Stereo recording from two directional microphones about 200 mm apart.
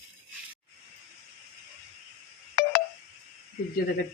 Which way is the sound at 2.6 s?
50° left (ahead or behind).